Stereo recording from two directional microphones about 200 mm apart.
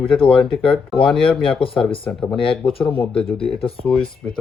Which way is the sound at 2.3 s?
25° left (ahead or behind).